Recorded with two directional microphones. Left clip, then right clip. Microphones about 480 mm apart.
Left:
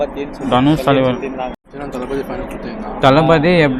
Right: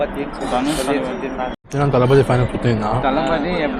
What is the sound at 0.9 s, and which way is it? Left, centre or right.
Speech, left.